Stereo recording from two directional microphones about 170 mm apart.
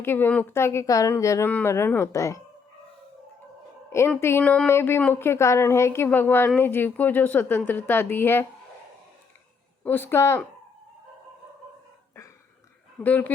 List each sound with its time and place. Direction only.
0.0 s a woman's voice: 15° left (ahead or behind)
3.8 s a woman's voice: 15° left (ahead or behind)
9.8 s a woman's voice: 10° left (ahead or behind)
13.0 s a woman's voice: 10° left (ahead or behind)